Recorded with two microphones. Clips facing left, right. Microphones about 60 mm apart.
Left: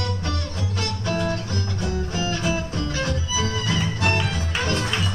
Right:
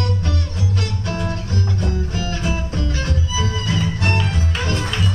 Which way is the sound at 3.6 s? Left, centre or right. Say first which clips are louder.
Right 2 dB; centre.